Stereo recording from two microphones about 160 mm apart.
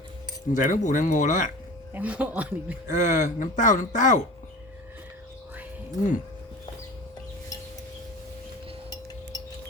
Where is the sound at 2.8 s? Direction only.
50° left (ahead or behind).